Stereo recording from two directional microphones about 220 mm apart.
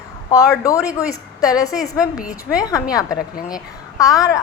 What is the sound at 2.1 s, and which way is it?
Speech, 5° right (ahead or behind).